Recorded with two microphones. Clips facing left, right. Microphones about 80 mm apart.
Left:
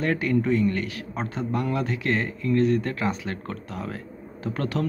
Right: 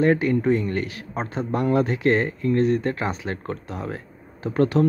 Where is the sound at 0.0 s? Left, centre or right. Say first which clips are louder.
Right 4 dB; right.